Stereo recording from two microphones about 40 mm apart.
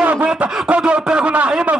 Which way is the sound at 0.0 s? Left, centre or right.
Right.